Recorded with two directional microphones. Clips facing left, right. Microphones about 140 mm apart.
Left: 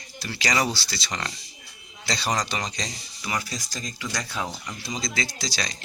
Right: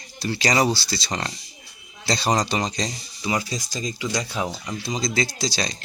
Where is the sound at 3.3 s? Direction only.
20° right (ahead or behind).